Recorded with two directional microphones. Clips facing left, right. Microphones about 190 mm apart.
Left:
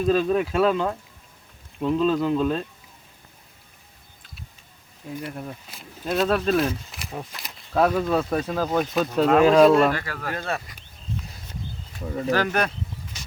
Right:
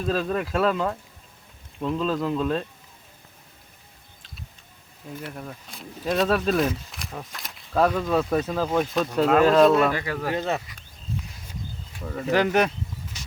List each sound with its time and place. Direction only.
0.1 s speech: centre (ahead or behind)
5.1 s speech: 10° left (ahead or behind); by 10.6 s 15° right (ahead or behind)
12.3 s speech: 20° right (ahead or behind)